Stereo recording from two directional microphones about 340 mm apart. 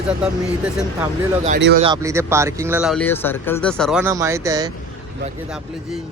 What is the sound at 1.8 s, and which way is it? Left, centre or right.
Speech, centre.